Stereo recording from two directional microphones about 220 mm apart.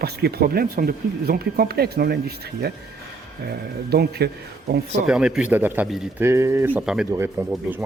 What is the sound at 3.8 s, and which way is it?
Speech, 45° right (ahead or behind).